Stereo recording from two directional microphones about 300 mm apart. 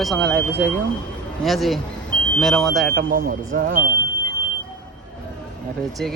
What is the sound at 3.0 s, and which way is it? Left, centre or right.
Speech, right.